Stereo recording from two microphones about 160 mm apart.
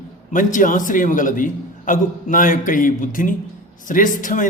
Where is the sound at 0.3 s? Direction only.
55° left (ahead or behind).